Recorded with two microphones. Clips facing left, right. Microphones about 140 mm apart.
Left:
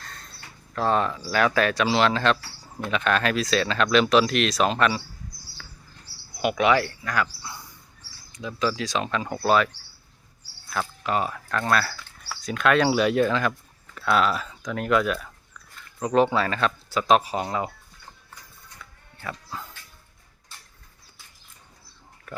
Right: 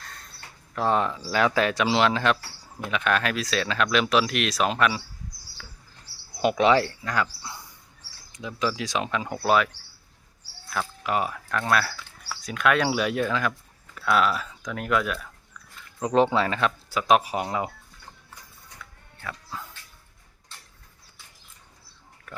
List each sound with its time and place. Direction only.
0.0 s speech: 5° right (ahead or behind)
6.3 s speech: 30° right (ahead or behind); by 9.6 s 10° right (ahead or behind)
11.0 s speech: 10° right (ahead or behind)
16.0 s speech: 20° right (ahead or behind)
19.2 s speech: centre (ahead or behind)
22.3 s pig: centre (ahead or behind)